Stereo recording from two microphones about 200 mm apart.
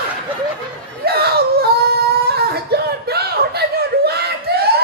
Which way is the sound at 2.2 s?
50° right (ahead or behind).